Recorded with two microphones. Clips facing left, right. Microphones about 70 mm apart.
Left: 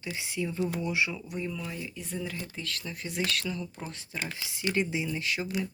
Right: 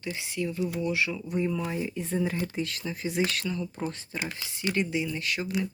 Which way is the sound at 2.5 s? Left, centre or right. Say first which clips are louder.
Right 6 dB; centre.